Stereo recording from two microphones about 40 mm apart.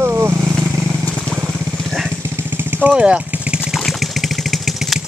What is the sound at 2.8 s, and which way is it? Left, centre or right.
Vehicle, right.